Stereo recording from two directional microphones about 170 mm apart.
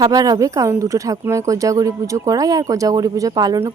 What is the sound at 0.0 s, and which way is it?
Speech, 20° right (ahead or behind).